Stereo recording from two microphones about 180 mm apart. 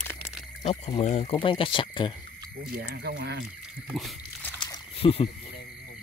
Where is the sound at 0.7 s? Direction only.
35° left (ahead or behind).